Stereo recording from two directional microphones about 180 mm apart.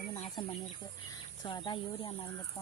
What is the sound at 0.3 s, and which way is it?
Insect, 25° left (ahead or behind).